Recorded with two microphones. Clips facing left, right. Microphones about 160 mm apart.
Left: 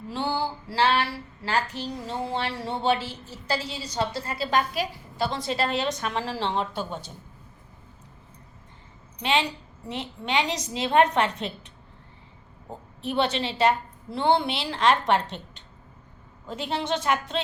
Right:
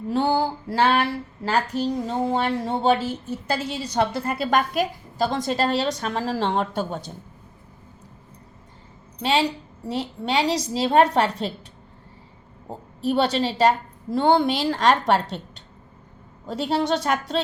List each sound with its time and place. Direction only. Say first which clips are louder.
0.1 s speech: right 7 dB; 45° right (ahead or behind)
9.2 s a woman's voice: right 4 dB; 40° right (ahead or behind)
13.0 s a woman's voice: right 5 dB; 40° right (ahead or behind)